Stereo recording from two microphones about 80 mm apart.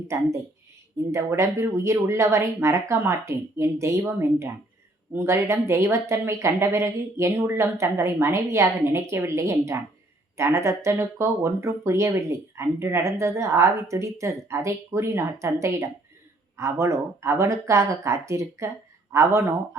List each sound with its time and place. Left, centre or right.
1.1 s speech: right